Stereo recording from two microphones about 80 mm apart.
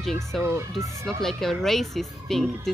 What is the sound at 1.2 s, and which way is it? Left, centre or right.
Speech, centre.